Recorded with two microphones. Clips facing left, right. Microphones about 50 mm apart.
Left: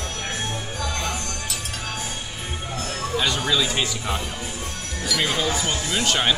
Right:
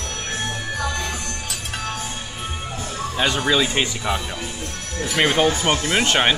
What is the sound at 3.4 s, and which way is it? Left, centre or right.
Speech, right.